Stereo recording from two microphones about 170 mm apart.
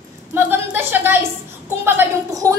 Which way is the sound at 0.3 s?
15° right (ahead or behind).